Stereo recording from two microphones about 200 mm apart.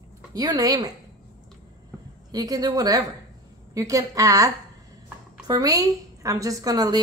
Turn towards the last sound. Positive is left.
turn(degrees=-20)  # may be behind; listen again after turning